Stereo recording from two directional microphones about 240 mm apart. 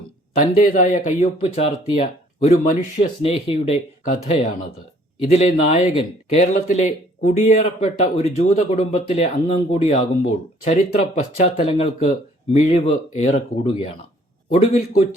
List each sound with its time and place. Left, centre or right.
0.5 s speech: left